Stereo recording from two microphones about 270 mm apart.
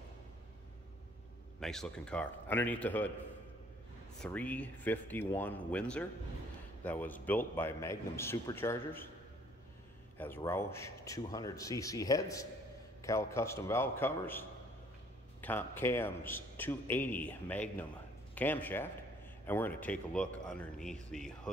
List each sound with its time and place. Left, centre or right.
1.6 s speech: centre
4.2 s a man's voice: centre
10.1 s a man's voice: centre
15.4 s a man's voice: centre